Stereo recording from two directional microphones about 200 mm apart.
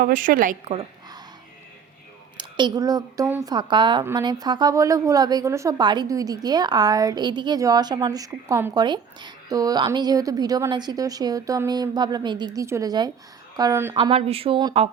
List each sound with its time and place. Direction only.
0.0 s a woman's voice: 40° right (ahead or behind)
2.4 s a woman's voice: 20° right (ahead or behind)
13.9 s a woman's voice: 25° right (ahead or behind)